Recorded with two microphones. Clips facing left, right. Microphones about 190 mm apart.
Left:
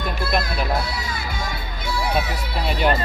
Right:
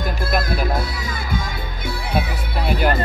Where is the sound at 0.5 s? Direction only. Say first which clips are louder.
Right 2 dB; 50° right (ahead or behind).